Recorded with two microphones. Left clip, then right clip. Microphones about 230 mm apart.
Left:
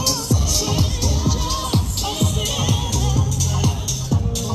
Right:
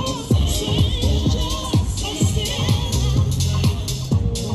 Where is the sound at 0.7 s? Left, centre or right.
Right.